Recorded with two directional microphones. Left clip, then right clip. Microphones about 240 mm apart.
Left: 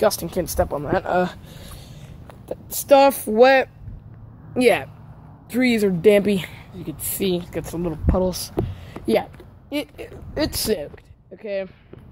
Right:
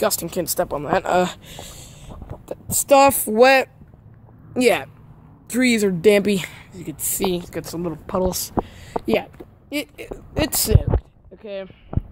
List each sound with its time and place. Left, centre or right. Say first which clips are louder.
0.0 s speech: left 2 dB; right
2.4 s speech: right 2 dB; right
9.0 s speech: left 1 dB; centre
9.4 s a sound: even; centre
10.3 s speech: right 1 dB; right
11.3 s speech: left 4 dB; centre